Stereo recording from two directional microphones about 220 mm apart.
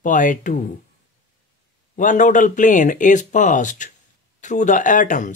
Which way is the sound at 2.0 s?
35° left (ahead or behind).